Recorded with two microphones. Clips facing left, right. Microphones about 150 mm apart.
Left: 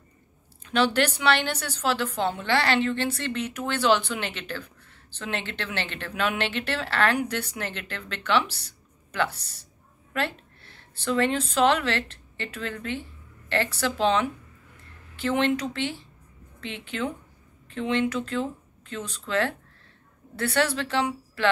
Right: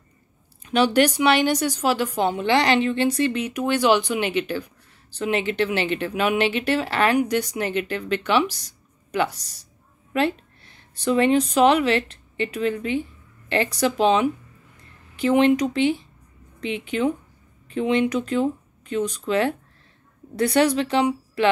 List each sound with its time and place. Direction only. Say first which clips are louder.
0.7 s speech: right 5 dB; 15° right (ahead or behind)